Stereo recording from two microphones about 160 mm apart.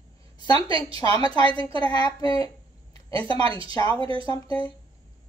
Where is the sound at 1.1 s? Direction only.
25° left (ahead or behind).